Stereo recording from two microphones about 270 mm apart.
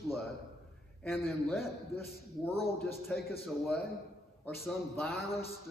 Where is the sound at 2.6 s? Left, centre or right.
Centre.